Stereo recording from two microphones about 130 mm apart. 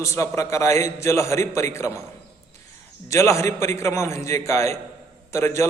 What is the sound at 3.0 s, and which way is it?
A man's voice, 20° left (ahead or behind).